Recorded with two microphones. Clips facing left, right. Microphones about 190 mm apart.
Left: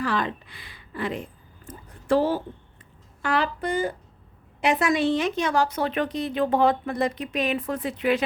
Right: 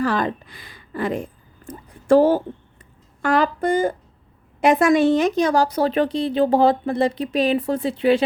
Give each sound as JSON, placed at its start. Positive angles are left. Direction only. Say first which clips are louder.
{"t": 0.0, "sound": "speech", "louder": "right 5 dB", "side_deg": -45}